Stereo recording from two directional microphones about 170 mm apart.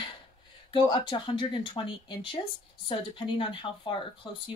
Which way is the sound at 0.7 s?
25° left (ahead or behind).